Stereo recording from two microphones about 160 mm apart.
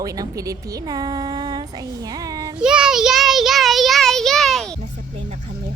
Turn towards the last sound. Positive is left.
turn(degrees=0)  # may be behind; listen again after turning